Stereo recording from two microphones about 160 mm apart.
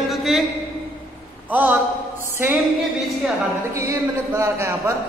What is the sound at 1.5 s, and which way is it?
Speech, 10° right (ahead or behind).